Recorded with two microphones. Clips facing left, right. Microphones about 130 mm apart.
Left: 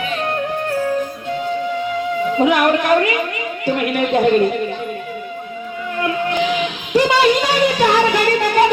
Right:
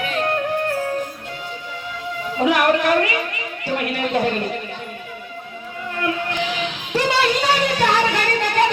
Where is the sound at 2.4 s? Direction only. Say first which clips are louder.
Left 1 dB; 20° left (ahead or behind).